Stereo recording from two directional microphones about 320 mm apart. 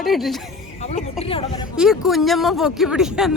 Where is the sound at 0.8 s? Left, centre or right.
Left.